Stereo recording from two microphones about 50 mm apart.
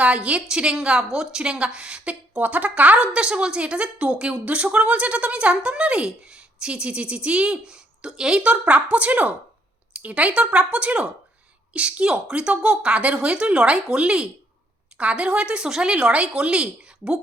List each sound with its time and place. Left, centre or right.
0.0 s a woman's voice: right
2.4 s a woman's voice: right